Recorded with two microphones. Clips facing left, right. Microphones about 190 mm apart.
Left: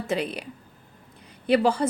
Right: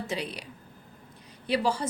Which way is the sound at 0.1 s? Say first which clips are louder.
Left 11 dB; 55° left (ahead or behind).